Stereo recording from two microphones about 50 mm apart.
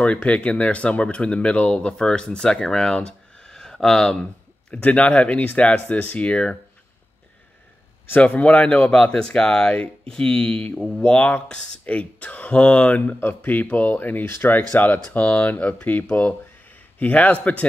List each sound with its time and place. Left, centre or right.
0.0 s speech: left; by 4.2 s centre
4.6 s speech: left
8.2 s speech: left
13.2 s speech: left